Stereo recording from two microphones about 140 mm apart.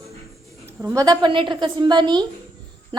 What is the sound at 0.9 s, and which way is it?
A woman's voice, 30° right (ahead or behind).